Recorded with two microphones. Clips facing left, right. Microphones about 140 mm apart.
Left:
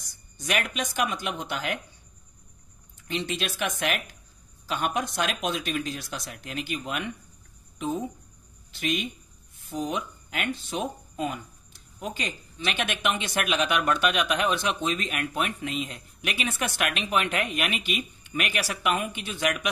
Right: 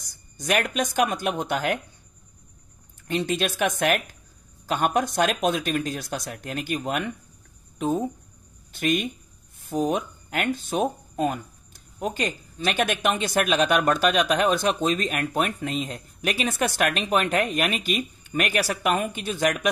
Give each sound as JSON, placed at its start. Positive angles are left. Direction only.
{"t": 0.0, "sound": "speech", "side_deg": -40}
{"t": 3.1, "sound": "speech", "side_deg": -45}
{"t": 8.7, "sound": "speech", "side_deg": -50}